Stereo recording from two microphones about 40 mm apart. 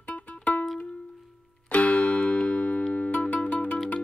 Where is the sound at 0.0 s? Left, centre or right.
Left.